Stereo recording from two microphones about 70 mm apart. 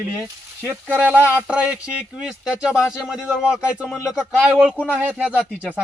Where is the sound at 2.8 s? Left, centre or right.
Centre.